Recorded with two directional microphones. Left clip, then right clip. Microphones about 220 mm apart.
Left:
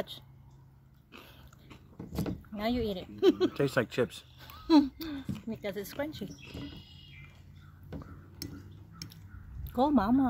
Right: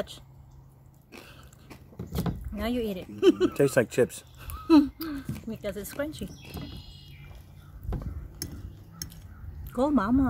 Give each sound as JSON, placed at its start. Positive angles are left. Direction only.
{"t": 2.5, "sound": "speech", "side_deg": 20}
{"t": 3.5, "sound": "speech", "side_deg": -20}
{"t": 4.4, "sound": "speech", "side_deg": 15}
{"t": 9.7, "sound": "speech", "side_deg": 20}